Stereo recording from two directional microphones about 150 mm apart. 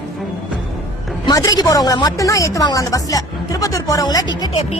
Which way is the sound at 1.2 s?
25° left (ahead or behind).